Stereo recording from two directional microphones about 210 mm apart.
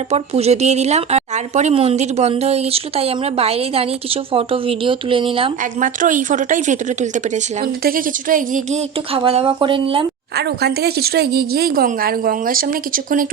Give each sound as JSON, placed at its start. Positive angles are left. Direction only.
{"t": 0.1, "sound": "a woman's voice", "side_deg": -30}
{"t": 5.8, "sound": "a woman's voice", "side_deg": -40}
{"t": 10.3, "sound": "a woman's voice", "side_deg": -50}